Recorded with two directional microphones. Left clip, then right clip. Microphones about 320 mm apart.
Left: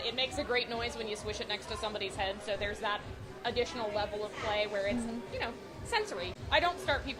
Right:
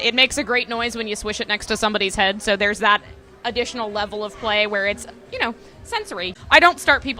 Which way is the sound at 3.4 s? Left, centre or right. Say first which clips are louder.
Right 10 dB; right.